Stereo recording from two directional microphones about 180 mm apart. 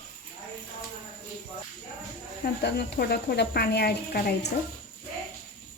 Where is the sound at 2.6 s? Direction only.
65° left (ahead or behind).